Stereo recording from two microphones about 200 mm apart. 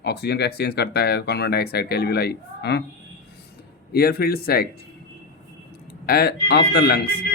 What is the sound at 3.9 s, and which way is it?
Speech, 50° left (ahead or behind).